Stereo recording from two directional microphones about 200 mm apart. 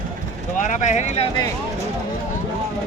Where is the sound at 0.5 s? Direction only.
40° left (ahead or behind).